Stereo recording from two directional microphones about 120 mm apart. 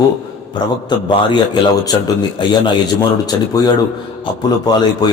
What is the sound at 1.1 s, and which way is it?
A man's voice, 40° left (ahead or behind).